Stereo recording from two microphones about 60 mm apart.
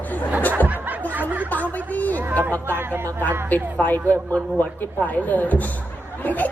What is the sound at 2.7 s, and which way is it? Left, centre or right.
Speech, right.